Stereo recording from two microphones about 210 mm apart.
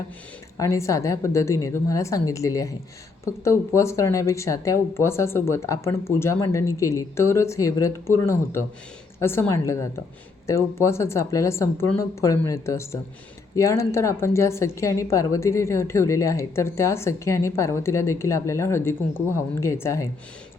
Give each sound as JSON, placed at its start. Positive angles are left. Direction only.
{"t": 0.5, "sound": "a woman's voice", "side_deg": 15}